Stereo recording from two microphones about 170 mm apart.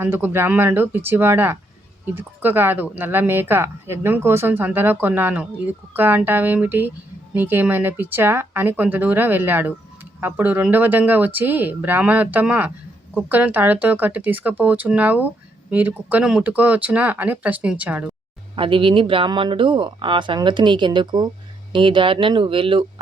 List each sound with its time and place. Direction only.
0.0 s speech: 15° right (ahead or behind)
18.5 s speech: 30° right (ahead or behind)